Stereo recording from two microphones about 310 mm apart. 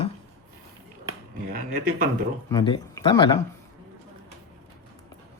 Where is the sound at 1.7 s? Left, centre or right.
Right.